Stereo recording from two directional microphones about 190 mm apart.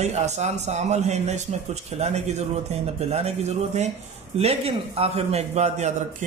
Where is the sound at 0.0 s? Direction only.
35° right (ahead or behind).